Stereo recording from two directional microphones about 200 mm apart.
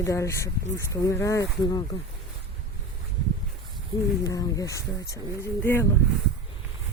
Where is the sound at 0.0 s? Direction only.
15° left (ahead or behind).